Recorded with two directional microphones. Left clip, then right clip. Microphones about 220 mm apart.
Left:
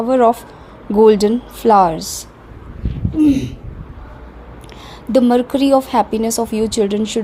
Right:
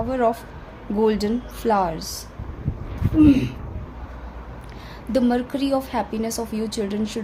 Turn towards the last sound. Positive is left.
turn(degrees=30)  # may be behind; listen again after turning